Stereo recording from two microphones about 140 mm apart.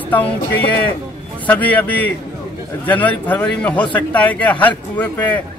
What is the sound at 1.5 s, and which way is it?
A man's voice, 10° left (ahead or behind).